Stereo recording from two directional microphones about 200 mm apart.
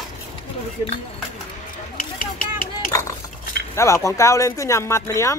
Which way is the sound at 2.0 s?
45° left (ahead or behind).